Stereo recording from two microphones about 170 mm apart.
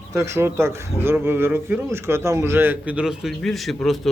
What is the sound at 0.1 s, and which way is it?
A man's voice, 15° right (ahead or behind).